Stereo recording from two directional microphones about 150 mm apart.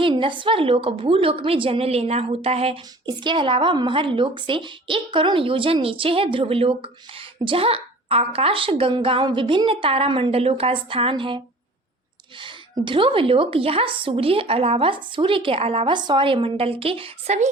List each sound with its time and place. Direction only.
0.0 s a woman's voice: 35° right (ahead or behind)